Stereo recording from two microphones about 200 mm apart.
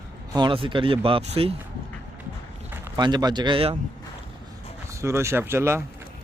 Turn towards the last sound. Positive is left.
turn(degrees=-10)  # may be behind; listen again after turning